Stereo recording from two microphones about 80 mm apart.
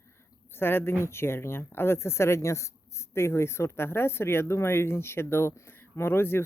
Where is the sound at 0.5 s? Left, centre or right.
Left.